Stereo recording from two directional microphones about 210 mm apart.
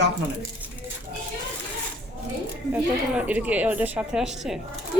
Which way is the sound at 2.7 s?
10° right (ahead or behind).